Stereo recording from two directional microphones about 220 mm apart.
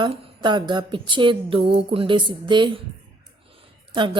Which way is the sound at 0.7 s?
20° right (ahead or behind).